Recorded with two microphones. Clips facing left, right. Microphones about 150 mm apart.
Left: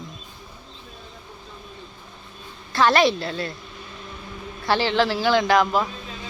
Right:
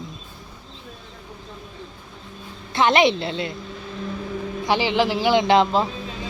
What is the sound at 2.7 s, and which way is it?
Speech, 20° right (ahead or behind).